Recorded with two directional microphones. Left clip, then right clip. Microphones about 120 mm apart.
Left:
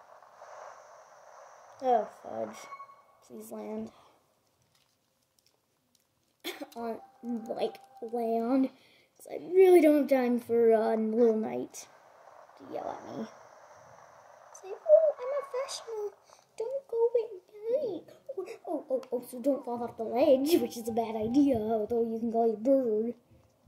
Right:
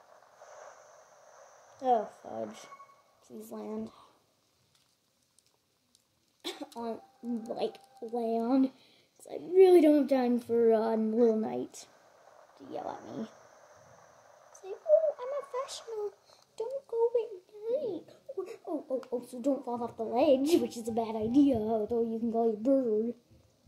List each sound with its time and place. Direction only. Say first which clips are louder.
0.1 s a sound: left 3 dB; 25° right (ahead or behind)
3.3 s speech: left 1 dB; 20° right (ahead or behind)
6.4 s cough: left 1 dB; 15° right (ahead or behind)
7.2 s speech: even; 25° right (ahead or behind)
7.5 s a sound: left 2 dB; 15° right (ahead or behind)
20.8 s a woman's voice: left 1 dB; 15° right (ahead or behind)